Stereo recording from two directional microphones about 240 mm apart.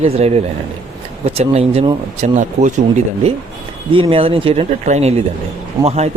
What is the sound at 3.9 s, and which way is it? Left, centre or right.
Speech, right.